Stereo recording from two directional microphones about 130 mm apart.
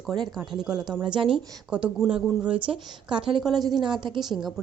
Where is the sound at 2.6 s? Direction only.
40° right (ahead or behind).